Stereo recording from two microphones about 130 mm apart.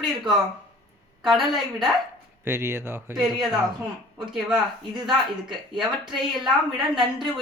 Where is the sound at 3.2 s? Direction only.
5° right (ahead or behind).